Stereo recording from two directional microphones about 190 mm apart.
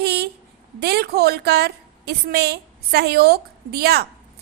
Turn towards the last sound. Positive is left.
turn(degrees=-55)  # may be behind; listen again after turning